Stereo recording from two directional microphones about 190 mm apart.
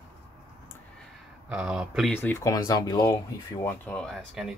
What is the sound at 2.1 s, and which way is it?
Speech, 15° left (ahead or behind).